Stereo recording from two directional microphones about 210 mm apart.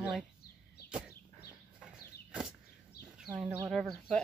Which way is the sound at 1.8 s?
5° right (ahead or behind).